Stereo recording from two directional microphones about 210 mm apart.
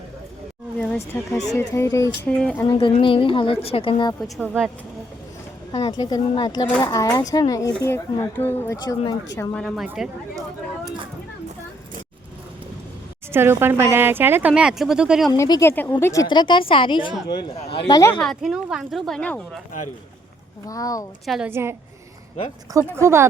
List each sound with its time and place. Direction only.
0.8 s speech: 10° left (ahead or behind)
2.6 s a woman's voice: 20° left (ahead or behind)
4.2 s a woman's voice: centre (ahead or behind)
5.7 s a woman's voice: 20° left (ahead or behind); by 10.1 s centre (ahead or behind)
13.3 s speech: 10° right (ahead or behind)
15.3 s a woman's voice: 20° left (ahead or behind)
18.2 s a woman's voice: centre (ahead or behind)
20.7 s speech: 15° left (ahead or behind)
21.2 s speech: 5° right (ahead or behind)
23.0 s speech: 10° right (ahead or behind)